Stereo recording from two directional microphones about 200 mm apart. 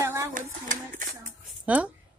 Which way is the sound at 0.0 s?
15° right (ahead or behind).